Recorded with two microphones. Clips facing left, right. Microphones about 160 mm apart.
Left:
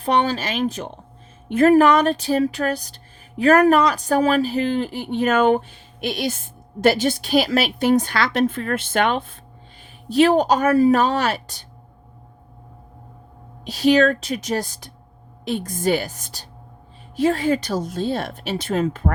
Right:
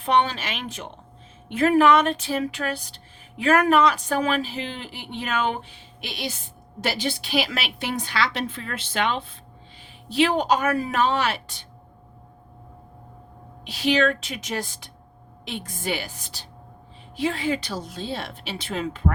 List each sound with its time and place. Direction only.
0.0 s a woman's voice: 40° left (ahead or behind)
13.7 s a woman's voice: 40° left (ahead or behind)